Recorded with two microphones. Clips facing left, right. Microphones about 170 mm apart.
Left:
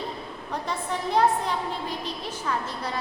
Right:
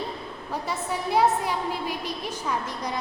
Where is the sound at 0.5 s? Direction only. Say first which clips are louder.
Even; 5° right (ahead or behind).